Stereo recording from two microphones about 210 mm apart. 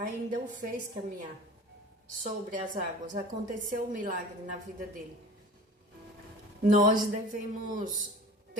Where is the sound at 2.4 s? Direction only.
40° right (ahead or behind).